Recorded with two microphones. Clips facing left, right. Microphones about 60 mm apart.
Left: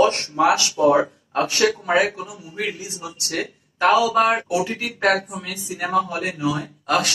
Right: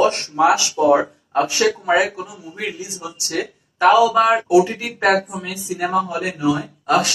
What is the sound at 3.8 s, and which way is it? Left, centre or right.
Speech, right.